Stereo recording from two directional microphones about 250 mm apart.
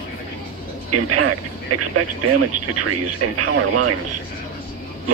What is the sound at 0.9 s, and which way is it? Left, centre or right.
Speech, right.